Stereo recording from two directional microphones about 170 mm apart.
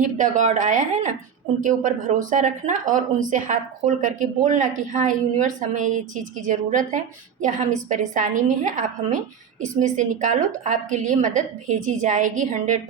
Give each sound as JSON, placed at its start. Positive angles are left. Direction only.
{"t": 0.0, "sound": "speech", "side_deg": -45}